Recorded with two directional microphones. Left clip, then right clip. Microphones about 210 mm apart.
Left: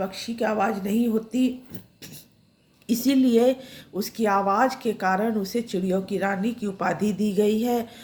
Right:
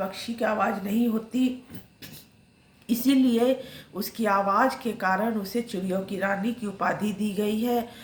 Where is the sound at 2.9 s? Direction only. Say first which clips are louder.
Left 2 dB; 55° left (ahead or behind).